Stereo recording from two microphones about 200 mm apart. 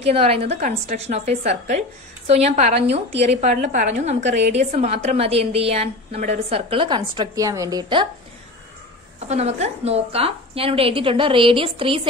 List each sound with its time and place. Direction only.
0.0 s a woman's voice: 30° right (ahead or behind)
9.3 s a woman's voice: 30° right (ahead or behind)